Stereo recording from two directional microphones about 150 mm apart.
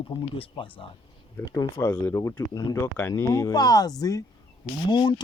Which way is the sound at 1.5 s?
25° left (ahead or behind).